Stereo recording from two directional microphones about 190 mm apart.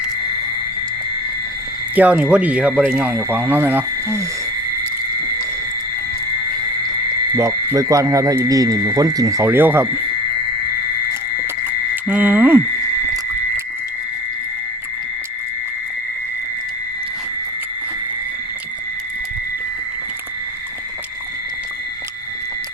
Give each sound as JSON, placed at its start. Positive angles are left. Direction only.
{"t": 2.0, "sound": "speech", "side_deg": -10}
{"t": 7.3, "sound": "speech", "side_deg": -15}
{"t": 11.6, "sound": "a sound", "side_deg": -10}